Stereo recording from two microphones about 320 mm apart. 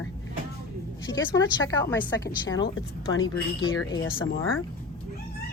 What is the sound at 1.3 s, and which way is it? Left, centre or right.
Speech, centre.